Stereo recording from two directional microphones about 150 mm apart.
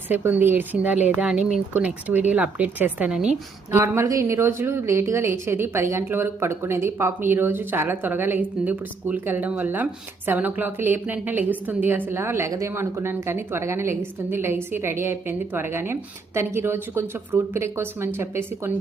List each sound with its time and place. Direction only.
0.1 s a woman's voice: 10° right (ahead or behind)
3.7 s a woman's voice: 20° right (ahead or behind)